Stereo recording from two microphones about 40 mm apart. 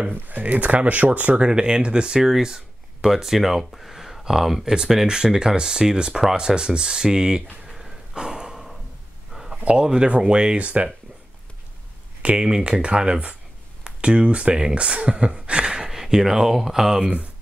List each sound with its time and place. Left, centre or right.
0.1 s speech: right
1.4 s speech: right
2.4 s a sound: centre
3.1 s speech: centre
7.6 s a sound: centre
9.7 s speech: right
12.2 s speech: right; by 17.1 s centre